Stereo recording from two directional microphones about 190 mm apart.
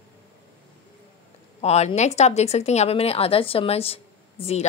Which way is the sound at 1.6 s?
35° left (ahead or behind).